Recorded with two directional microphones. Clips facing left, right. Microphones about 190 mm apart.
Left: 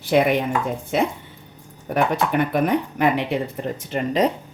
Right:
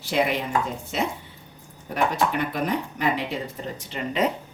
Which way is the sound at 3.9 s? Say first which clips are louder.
Left 4 dB; 35° left (ahead or behind).